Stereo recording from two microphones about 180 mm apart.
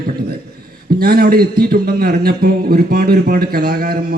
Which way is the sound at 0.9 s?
60° right (ahead or behind).